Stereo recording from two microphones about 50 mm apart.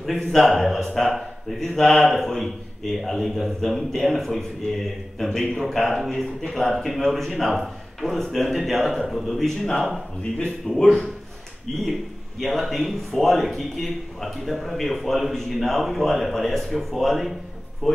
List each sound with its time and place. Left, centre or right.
0.0 s speech: centre
12.4 s speech: centre